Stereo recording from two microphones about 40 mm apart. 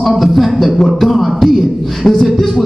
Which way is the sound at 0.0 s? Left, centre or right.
Centre.